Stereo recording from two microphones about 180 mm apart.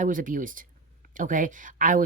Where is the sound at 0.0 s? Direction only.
50° right (ahead or behind).